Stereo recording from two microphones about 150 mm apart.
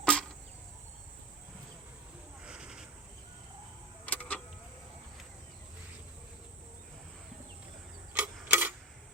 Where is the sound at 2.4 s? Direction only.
5° right (ahead or behind).